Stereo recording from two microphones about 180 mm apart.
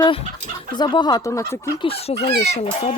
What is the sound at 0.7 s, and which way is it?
Speech, 25° left (ahead or behind).